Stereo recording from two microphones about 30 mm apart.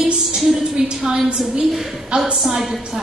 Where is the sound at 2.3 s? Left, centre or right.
Centre.